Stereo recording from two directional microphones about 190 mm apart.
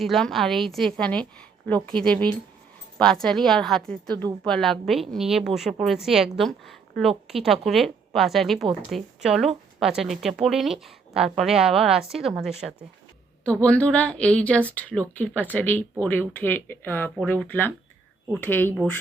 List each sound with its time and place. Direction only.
0.0 s speech: centre (ahead or behind)
2.1 s speech: 25° right (ahead or behind)
3.0 s speech: 5° left (ahead or behind)